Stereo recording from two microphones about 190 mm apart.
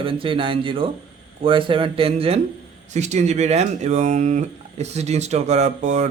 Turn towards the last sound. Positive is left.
turn(degrees=-40)  # may be behind; listen again after turning